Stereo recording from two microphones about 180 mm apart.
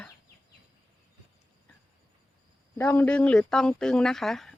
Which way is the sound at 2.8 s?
10° left (ahead or behind).